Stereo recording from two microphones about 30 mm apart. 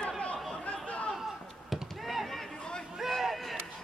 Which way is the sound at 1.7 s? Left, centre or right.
Centre.